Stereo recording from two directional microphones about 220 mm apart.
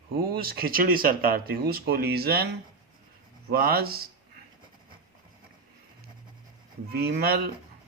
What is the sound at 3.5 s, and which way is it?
Speech, 45° right (ahead or behind).